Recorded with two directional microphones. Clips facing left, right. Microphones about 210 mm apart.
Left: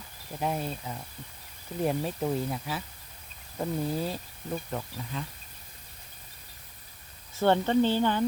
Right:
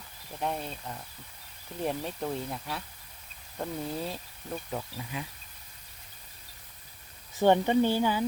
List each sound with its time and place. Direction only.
0.3 s speech: 5° left (ahead or behind)
5.1 s speech: 10° right (ahead or behind)
7.3 s speech: 15° right (ahead or behind)